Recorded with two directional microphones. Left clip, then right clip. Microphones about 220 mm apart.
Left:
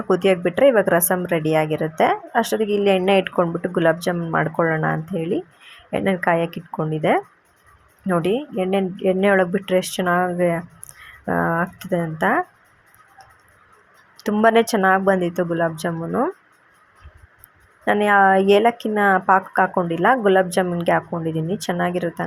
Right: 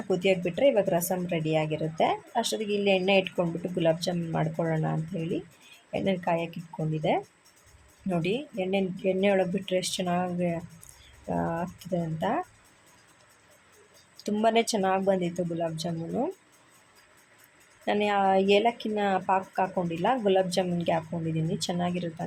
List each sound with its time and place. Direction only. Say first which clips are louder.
0.1 s speech: left 8 dB; 20° left (ahead or behind)
8.0 s speech: left 9 dB; 15° left (ahead or behind)
14.2 s speech: left 9 dB; 20° left (ahead or behind)
17.8 s speech: left 10 dB; 15° left (ahead or behind)